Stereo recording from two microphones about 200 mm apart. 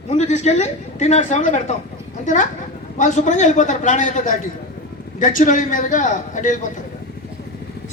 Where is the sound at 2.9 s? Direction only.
35° left (ahead or behind).